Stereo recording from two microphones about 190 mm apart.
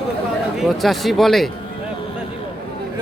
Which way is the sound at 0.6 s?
Centre (ahead or behind).